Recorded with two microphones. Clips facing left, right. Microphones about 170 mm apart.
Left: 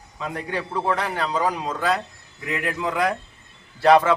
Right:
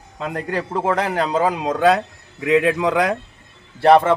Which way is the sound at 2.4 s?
90° right.